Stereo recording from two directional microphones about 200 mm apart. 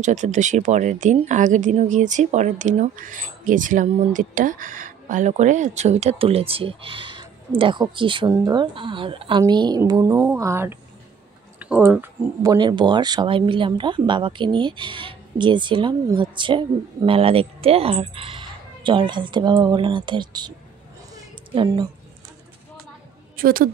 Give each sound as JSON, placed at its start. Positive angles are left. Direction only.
{"t": 0.0, "sound": "a woman's voice", "side_deg": -35}
{"t": 21.1, "sound": "a sound", "side_deg": -25}
{"t": 23.3, "sound": "a woman's voice", "side_deg": -45}